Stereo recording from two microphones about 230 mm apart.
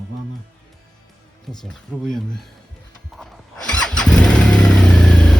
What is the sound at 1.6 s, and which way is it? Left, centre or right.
Speech, centre.